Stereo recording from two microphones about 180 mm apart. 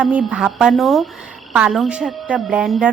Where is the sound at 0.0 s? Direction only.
5° right (ahead or behind).